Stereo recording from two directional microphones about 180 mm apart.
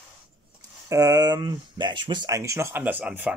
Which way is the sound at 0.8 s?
20° right (ahead or behind).